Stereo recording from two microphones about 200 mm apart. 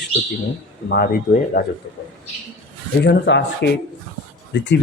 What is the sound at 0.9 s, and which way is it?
Speech, 45° left (ahead or behind).